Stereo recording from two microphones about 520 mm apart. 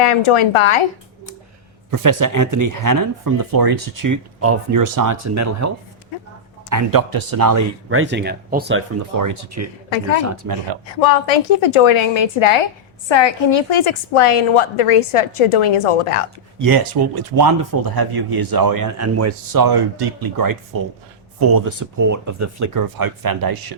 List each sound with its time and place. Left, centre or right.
0.0 s a woman's voice: left
1.9 s speech: right
7.9 s speech: right
9.1 s speech: right
11.0 s a woman's voice: left
13.1 s a woman's voice: left
16.6 s speech: right